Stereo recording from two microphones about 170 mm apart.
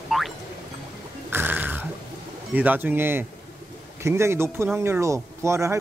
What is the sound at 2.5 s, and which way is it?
Speech, 10° right (ahead or behind).